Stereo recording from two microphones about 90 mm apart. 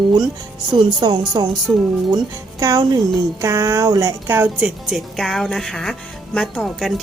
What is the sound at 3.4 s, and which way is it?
Music, 35° right (ahead or behind).